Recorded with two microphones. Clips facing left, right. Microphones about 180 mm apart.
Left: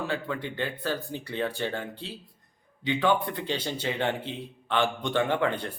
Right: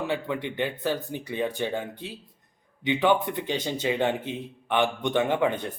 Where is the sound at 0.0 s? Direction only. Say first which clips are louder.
Right 3 dB; 20° right (ahead or behind).